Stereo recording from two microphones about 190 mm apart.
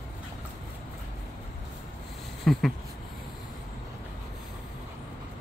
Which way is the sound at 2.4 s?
Centre (ahead or behind).